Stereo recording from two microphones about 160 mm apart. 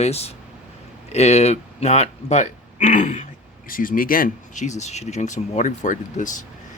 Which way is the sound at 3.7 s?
60° left (ahead or behind).